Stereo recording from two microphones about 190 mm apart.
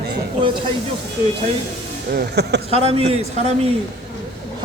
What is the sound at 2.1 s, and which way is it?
Speech, 60° right (ahead or behind).